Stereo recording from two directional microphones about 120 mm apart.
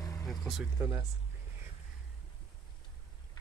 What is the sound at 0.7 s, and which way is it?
Speech, 30° right (ahead or behind).